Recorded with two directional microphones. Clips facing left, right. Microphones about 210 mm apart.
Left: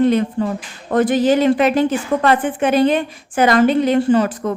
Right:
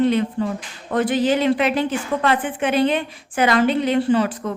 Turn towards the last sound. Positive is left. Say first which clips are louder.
# left 3 dB
turn(degrees=45)  # may be behind; listen again after turning